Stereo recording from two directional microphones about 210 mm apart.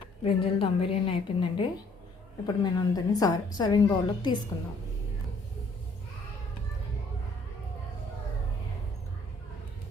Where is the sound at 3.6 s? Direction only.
20° left (ahead or behind).